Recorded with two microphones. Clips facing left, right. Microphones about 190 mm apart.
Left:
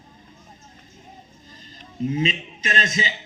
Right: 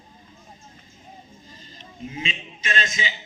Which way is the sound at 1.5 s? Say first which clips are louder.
Even; 40° left (ahead or behind).